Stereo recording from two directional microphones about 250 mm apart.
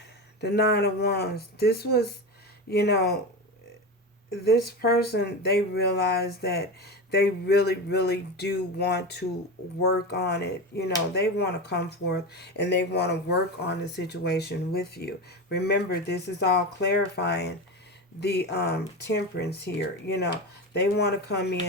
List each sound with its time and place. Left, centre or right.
0.4 s speech: left
4.4 s speech: left